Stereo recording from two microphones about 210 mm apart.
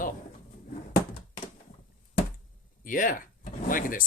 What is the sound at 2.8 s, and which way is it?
Speech, 40° left (ahead or behind).